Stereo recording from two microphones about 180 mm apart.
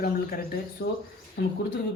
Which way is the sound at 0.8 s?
90° left.